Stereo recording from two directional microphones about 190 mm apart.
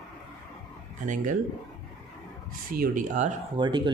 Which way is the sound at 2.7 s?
45° right (ahead or behind).